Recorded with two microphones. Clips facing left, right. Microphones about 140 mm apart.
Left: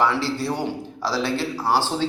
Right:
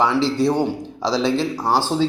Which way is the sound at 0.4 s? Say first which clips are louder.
Right 7 dB; 15° right (ahead or behind).